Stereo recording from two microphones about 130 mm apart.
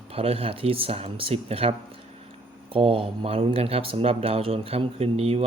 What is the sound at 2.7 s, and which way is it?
Speech, 45° right (ahead or behind).